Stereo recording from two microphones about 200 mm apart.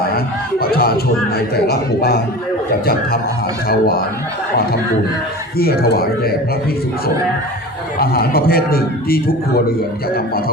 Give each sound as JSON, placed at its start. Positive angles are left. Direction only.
{"t": 0.6, "sound": "music", "side_deg": 50}
{"t": 1.5, "sound": "a man's voice", "side_deg": 50}
{"t": 5.5, "sound": "a man's voice", "side_deg": 50}
{"t": 7.9, "sound": "a man's voice", "side_deg": 50}